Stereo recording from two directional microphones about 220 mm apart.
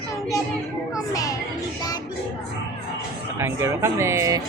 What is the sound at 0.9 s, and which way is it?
Music, 15° left (ahead or behind).